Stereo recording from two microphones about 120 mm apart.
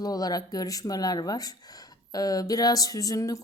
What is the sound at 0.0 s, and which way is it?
A woman's voice, 30° left (ahead or behind).